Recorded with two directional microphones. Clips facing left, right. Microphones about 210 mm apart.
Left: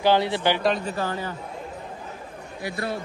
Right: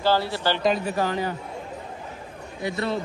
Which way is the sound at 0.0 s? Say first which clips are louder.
Left 2 dB; 20° left (ahead or behind).